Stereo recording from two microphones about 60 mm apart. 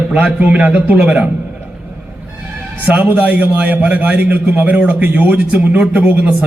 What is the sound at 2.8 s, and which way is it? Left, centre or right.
A man's voice, right.